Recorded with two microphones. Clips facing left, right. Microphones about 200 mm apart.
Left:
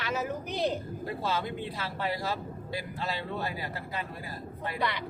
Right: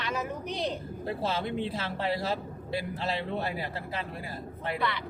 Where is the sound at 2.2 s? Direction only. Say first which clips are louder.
Right 2 dB; 25° right (ahead or behind).